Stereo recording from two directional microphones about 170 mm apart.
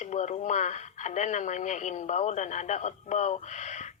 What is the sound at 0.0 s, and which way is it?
Speech, 45° left (ahead or behind).